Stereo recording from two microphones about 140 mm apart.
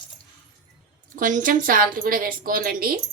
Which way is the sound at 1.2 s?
70° right (ahead or behind).